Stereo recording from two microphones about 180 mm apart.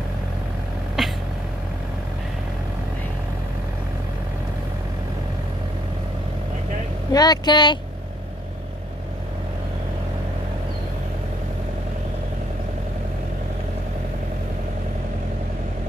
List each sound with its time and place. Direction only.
1.0 s vehicle: 5° right (ahead or behind)
7.1 s speech: 20° left (ahead or behind)